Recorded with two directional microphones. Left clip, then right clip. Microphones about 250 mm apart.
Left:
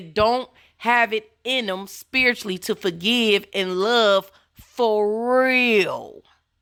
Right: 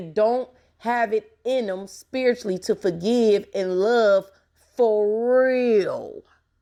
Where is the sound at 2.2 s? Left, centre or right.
Left.